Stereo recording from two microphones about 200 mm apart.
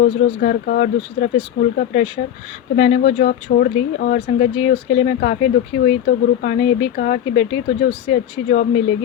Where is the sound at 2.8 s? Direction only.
35° left (ahead or behind).